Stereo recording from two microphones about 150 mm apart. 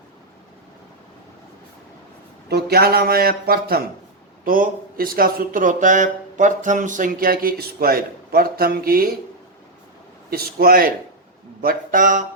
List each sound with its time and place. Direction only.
2.5 s speech: 90° right
4.4 s speech: 70° right (ahead or behind)
10.2 s speech: 90° right
11.6 s speech: 70° right (ahead or behind)